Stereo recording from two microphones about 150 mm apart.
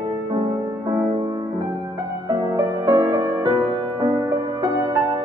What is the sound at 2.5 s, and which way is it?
Music, 20° right (ahead or behind).